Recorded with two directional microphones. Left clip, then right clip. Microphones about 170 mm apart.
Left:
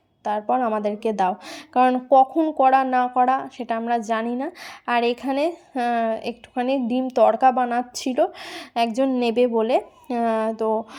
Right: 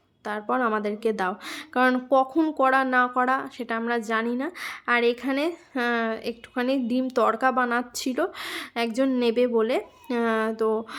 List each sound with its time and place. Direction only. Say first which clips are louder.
0.3 s speech: left 4 dB; 5° left (ahead or behind)